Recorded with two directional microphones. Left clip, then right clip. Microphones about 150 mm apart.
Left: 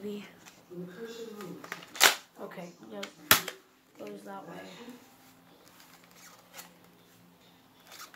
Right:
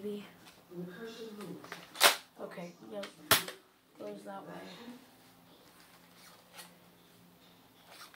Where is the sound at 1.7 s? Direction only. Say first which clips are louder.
Left 3 dB; 55° left (ahead or behind).